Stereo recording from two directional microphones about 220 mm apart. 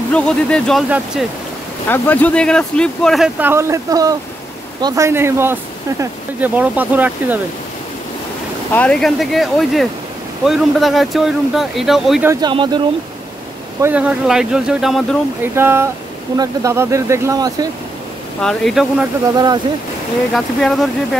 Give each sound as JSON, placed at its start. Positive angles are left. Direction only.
{"t": 0.1, "sound": "speech", "side_deg": 5}
{"t": 1.9, "sound": "speech", "side_deg": 5}
{"t": 8.7, "sound": "speech", "side_deg": 5}
{"t": 12.3, "sound": "speech", "side_deg": -20}
{"t": 13.7, "sound": "speech", "side_deg": -10}
{"t": 18.4, "sound": "speech", "side_deg": 0}
{"t": 19.3, "sound": "speech", "side_deg": -20}
{"t": 20.3, "sound": "speech", "side_deg": 0}